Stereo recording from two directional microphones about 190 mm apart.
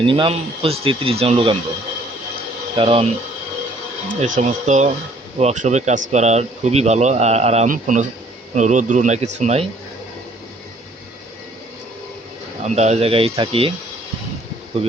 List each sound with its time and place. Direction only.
0.0 s speech: 25° right (ahead or behind)
2.7 s speech: 30° right (ahead or behind)
4.1 s speech: 40° right (ahead or behind)
12.6 s speech: 35° right (ahead or behind)